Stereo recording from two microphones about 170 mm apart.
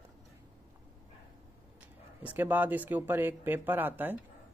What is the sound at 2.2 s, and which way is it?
Speech, 10° right (ahead or behind).